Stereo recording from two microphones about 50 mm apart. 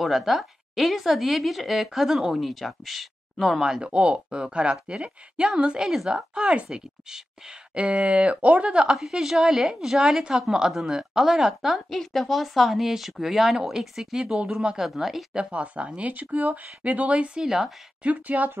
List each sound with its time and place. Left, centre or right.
0.0 s speech: centre
3.8 s speech: right
8.9 s a woman's voice: centre
11.9 s speech: centre
15.3 s speech: right
17.4 s a woman's voice: centre
18.0 s speech: right